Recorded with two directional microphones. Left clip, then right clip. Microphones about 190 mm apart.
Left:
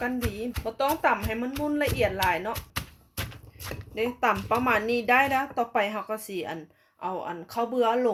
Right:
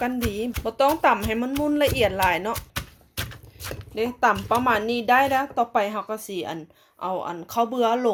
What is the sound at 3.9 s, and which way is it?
Speech, 25° right (ahead or behind).